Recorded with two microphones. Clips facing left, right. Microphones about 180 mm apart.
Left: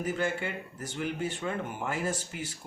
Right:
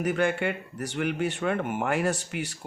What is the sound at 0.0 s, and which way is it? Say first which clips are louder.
Speech: right 6 dB; 70° right (ahead or behind).